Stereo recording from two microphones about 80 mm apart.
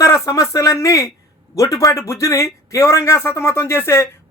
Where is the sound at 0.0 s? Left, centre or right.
Left.